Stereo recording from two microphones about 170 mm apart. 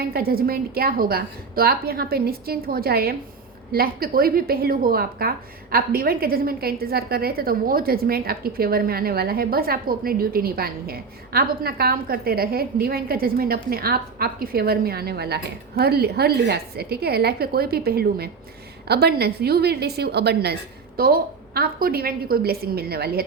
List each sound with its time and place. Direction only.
0.0 s a woman's voice: 65° right (ahead or behind)